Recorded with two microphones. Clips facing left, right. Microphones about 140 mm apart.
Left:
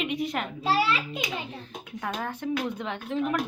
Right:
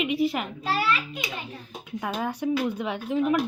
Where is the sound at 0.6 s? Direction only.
25° left (ahead or behind).